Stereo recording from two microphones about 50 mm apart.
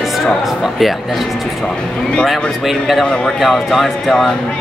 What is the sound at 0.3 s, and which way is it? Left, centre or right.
Speech, centre.